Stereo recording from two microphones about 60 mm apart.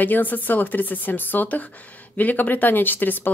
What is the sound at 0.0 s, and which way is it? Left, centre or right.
A woman's voice, left.